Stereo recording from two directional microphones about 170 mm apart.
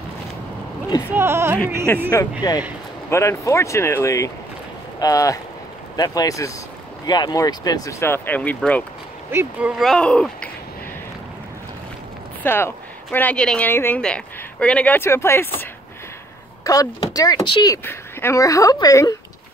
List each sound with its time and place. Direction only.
1.1 s speech: 15° right (ahead or behind)
2.0 s speech: 20° left (ahead or behind)
9.3 s speech: 10° right (ahead or behind); by 10.5 s 5° left (ahead or behind)
12.4 s speech: 15° left (ahead or behind)
16.6 s speech: 20° left (ahead or behind)